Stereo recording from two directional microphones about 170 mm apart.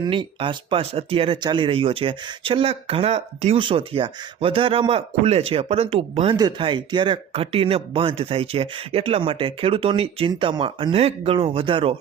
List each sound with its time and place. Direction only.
0.0 s speech: 30° right (ahead or behind)